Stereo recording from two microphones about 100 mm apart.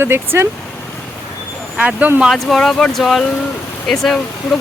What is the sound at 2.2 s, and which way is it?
Speech, centre (ahead or behind).